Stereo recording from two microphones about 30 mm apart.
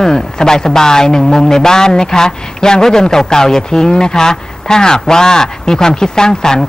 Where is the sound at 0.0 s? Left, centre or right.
Left.